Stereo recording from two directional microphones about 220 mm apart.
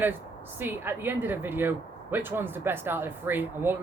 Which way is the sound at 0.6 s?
10° right (ahead or behind).